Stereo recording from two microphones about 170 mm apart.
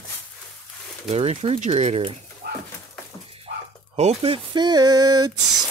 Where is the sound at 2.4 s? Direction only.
55° right (ahead or behind).